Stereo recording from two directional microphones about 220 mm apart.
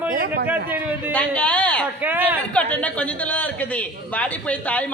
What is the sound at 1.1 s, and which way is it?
Speech, 5° left (ahead or behind).